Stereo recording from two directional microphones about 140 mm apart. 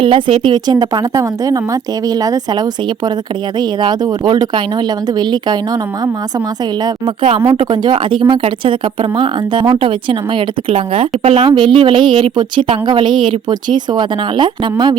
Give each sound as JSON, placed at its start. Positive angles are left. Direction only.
{"t": 0.0, "sound": "a woman's voice", "side_deg": -35}
{"t": 6.8, "sound": "speech", "side_deg": -35}